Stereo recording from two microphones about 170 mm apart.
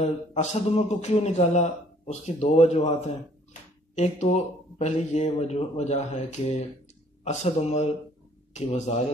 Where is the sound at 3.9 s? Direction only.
40° left (ahead or behind).